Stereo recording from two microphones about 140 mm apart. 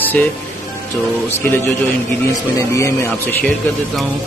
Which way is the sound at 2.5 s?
20° left (ahead or behind).